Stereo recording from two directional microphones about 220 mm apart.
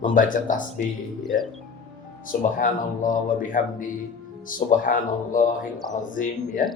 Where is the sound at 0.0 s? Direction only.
35° left (ahead or behind).